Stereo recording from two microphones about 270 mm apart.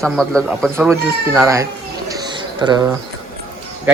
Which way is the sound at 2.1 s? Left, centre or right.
Centre.